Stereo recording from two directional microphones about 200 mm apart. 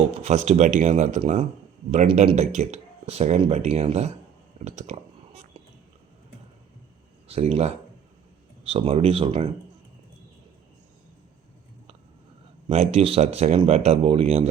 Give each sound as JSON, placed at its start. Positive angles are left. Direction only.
{"t": 0.2, "sound": "speech", "side_deg": -35}
{"t": 4.6, "sound": "a sound", "side_deg": -35}
{"t": 7.3, "sound": "speech", "side_deg": -30}
{"t": 12.6, "sound": "speech", "side_deg": -30}